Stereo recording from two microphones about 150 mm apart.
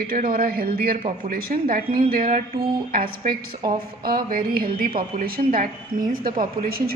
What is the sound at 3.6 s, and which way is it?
Speech, 30° right (ahead or behind).